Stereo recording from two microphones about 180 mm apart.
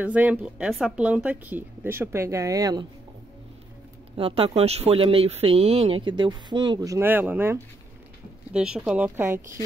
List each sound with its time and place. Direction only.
0.0 s speech: 10° right (ahead or behind)
4.2 s speech: 30° right (ahead or behind); by 9.4 s 15° right (ahead or behind)